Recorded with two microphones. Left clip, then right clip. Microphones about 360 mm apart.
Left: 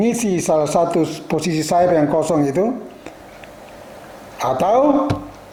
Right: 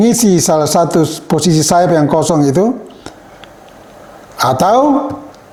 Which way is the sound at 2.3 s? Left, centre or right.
Right.